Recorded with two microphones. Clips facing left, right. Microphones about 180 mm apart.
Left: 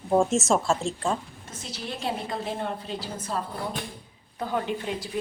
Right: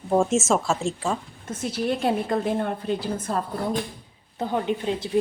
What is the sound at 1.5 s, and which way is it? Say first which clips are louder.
A woman's voice: right 11 dB; 55° right (ahead or behind).